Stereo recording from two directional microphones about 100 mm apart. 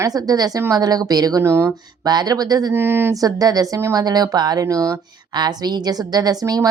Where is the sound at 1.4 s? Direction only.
25° right (ahead or behind).